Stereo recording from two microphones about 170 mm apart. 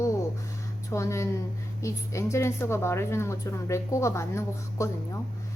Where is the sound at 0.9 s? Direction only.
15° left (ahead or behind).